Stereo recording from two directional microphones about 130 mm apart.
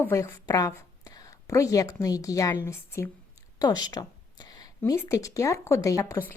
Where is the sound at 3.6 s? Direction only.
35° left (ahead or behind).